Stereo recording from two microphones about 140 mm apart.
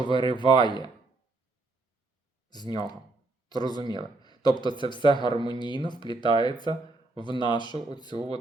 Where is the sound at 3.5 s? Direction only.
30° left (ahead or behind).